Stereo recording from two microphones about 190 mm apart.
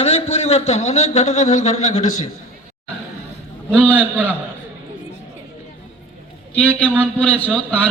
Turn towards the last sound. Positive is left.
turn(degrees=5)  # may be behind; listen again after turning